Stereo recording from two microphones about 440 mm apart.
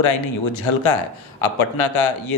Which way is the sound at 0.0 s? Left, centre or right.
Left.